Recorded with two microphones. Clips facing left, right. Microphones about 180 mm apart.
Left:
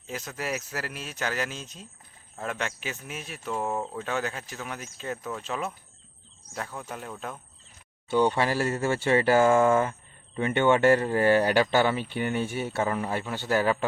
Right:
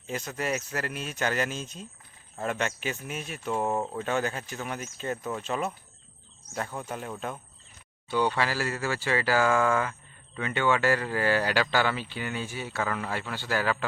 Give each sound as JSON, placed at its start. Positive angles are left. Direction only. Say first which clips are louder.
{"t": 0.1, "sound": "speech", "louder": "right 2 dB", "side_deg": 0}
{"t": 8.1, "sound": "speech", "louder": "left 3 dB", "side_deg": 25}